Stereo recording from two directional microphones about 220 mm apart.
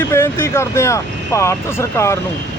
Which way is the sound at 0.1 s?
10° left (ahead or behind).